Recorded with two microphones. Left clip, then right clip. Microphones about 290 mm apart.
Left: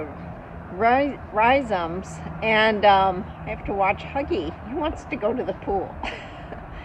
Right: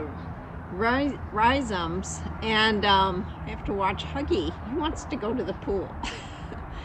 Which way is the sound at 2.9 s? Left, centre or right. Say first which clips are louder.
Left 4 dB; centre.